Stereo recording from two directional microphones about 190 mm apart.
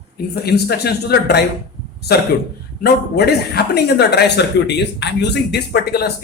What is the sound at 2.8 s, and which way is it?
A man's voice, 55° left (ahead or behind).